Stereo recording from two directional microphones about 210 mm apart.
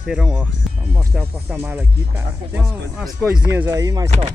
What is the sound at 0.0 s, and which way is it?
Speech, 5° right (ahead or behind).